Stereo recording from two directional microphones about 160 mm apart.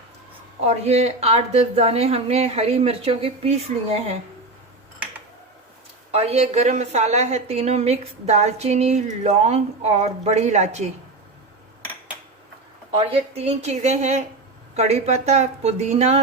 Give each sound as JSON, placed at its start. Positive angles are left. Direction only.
{"t": 0.6, "sound": "speech", "side_deg": -40}
{"t": 6.1, "sound": "a woman's voice", "side_deg": -40}
{"t": 12.9, "sound": "a woman's voice", "side_deg": -35}